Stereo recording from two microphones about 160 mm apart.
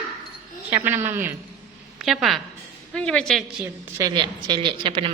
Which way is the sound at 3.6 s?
20° right (ahead or behind).